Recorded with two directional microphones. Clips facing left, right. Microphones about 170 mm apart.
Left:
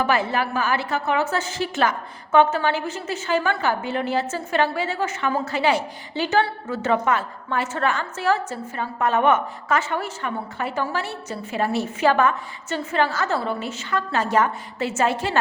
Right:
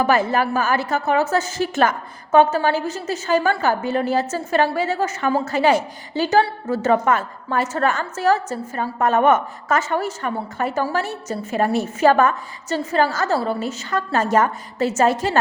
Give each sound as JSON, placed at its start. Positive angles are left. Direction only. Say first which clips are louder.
{"t": 0.0, "sound": "a woman's voice", "louder": "right 4 dB", "side_deg": -45}